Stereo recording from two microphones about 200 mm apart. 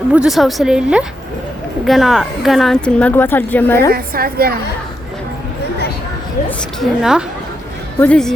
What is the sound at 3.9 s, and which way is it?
Speech, 50° right (ahead or behind).